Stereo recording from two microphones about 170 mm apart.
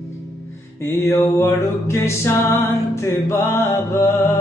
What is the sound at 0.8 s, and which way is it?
Music, 15° left (ahead or behind).